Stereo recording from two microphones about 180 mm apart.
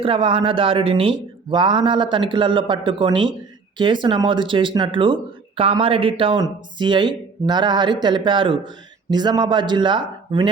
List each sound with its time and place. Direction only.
0.0 s speech: 30° right (ahead or behind)